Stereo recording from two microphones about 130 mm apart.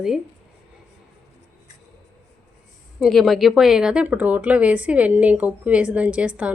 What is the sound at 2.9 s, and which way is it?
Speech, centre (ahead or behind).